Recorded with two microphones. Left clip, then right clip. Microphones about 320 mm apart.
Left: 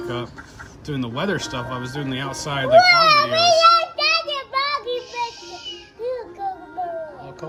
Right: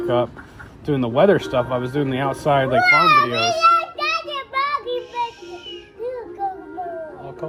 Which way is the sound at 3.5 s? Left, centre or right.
Left.